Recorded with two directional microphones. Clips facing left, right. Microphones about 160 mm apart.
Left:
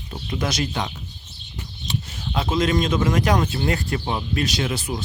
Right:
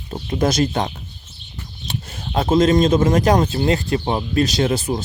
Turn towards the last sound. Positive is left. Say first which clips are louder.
# right 6 dB
turn(degrees=-35)  # may be behind; listen again after turning